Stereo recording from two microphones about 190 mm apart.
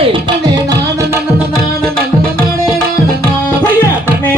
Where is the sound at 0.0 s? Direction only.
25° right (ahead or behind).